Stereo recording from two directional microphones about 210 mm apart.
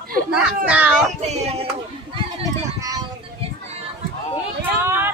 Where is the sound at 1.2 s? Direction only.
30° right (ahead or behind).